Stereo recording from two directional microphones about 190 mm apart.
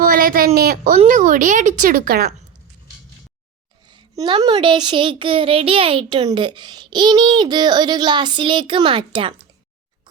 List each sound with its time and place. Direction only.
0.0 s a woman's voice: 50° right (ahead or behind)
0.9 s speech: 40° right (ahead or behind)
4.1 s speech: 20° right (ahead or behind)